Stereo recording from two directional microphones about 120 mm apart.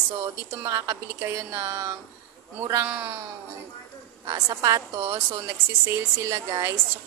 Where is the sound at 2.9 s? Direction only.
10° right (ahead or behind).